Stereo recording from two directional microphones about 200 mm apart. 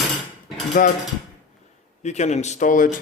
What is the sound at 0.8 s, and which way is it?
Speech, 40° left (ahead or behind).